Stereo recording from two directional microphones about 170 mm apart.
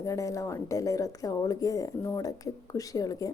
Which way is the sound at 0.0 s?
20° left (ahead or behind).